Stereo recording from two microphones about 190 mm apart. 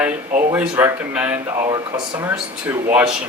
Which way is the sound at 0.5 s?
10° right (ahead or behind).